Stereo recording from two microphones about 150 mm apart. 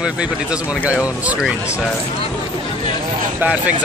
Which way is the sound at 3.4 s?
10° right (ahead or behind).